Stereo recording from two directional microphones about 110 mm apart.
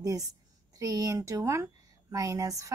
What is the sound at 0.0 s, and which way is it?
A woman's voice, 30° right (ahead or behind).